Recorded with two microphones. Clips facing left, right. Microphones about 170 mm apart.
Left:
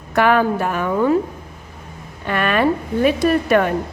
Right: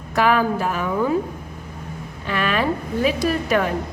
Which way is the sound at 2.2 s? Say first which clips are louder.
Left 4 dB; 55° left (ahead or behind).